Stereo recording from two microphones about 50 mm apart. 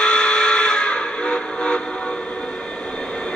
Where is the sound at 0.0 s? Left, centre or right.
Centre.